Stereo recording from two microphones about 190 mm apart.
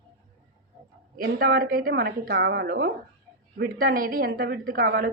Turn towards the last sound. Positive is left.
turn(degrees=-50)  # may be behind; listen again after turning